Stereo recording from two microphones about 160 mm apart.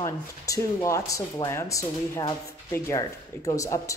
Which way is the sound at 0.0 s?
20° left (ahead or behind).